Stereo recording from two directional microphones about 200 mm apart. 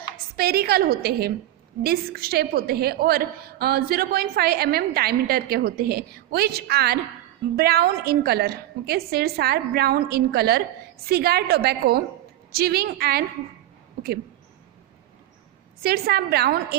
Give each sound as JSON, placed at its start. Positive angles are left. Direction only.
{"t": 0.3, "sound": "a woman's voice", "side_deg": -50}
{"t": 15.8, "sound": "a woman's voice", "side_deg": -50}